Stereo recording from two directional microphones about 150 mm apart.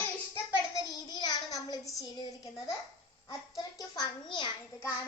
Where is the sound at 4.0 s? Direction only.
30° left (ahead or behind).